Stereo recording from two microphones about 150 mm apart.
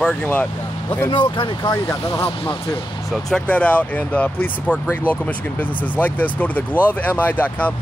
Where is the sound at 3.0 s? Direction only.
Centre (ahead or behind).